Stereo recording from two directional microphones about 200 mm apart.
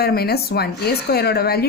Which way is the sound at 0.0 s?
50° left (ahead or behind).